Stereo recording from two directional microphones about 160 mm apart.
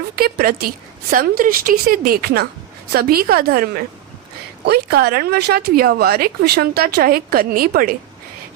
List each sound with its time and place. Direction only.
0.2 s a woman's voice: 70° right (ahead or behind)
4.6 s speech: 85° right; by 7.9 s 65° right (ahead or behind)